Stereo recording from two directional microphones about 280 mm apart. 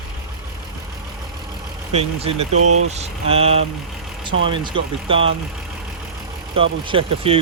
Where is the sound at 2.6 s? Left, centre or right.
Right.